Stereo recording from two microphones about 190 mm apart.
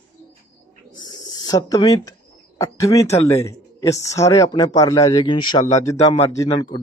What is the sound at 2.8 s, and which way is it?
Speech, 15° left (ahead or behind).